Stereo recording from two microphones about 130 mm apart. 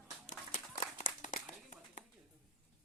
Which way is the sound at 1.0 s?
70° left (ahead or behind).